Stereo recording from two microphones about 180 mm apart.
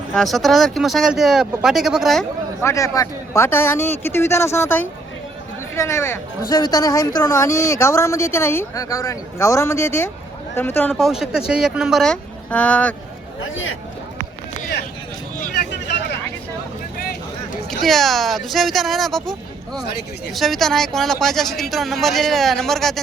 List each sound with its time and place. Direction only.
0.1 s speech: centre (ahead or behind)
2.6 s speech: 15° left (ahead or behind)
15.4 s a sound: 45° left (ahead or behind)
15.7 s vehicle: 70° left (ahead or behind)
17.7 s speech: centre (ahead or behind)